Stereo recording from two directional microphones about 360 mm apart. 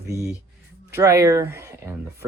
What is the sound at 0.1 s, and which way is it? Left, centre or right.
Speech, centre.